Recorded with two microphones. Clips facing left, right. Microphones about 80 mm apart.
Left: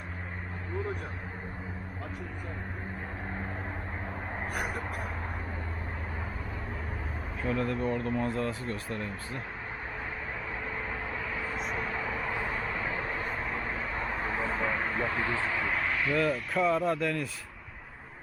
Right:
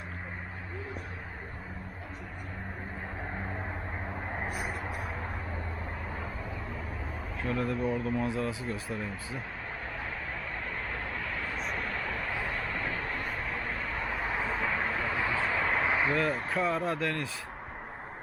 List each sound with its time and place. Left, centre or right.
4.7 s vehicle: centre
7.4 s speech: centre
11.3 s vehicle: centre
14.4 s a sound: centre
15.2 s vehicle: centre
15.9 s a sound: right
16.5 s speech: centre